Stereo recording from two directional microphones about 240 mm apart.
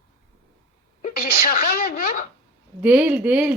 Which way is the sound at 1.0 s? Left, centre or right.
Left.